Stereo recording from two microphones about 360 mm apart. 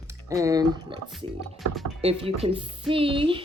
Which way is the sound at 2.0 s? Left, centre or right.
Centre.